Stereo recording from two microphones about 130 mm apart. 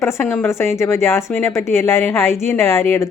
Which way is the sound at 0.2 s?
15° left (ahead or behind).